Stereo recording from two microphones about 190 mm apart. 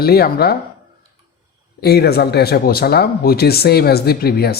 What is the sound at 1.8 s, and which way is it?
Speech, 55° left (ahead or behind).